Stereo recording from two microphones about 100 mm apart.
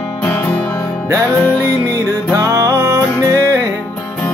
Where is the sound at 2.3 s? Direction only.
35° right (ahead or behind).